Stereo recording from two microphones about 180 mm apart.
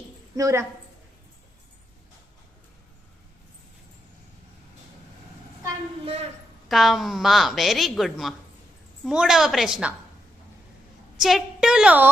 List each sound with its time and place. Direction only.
0.3 s a woman's voice: 20° right (ahead or behind)
6.7 s a woman's voice: centre (ahead or behind)
11.2 s a woman's voice: centre (ahead or behind)